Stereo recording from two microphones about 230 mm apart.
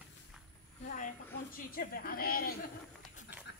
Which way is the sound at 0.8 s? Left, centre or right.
Left.